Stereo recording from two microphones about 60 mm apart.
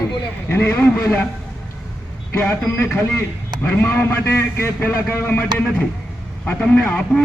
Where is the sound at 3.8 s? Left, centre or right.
Left.